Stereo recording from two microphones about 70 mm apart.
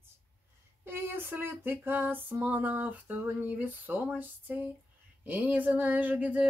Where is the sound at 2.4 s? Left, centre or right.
Right.